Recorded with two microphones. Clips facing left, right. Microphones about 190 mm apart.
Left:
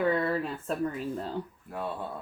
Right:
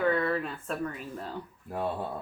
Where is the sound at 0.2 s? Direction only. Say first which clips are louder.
Even; 35° left (ahead or behind).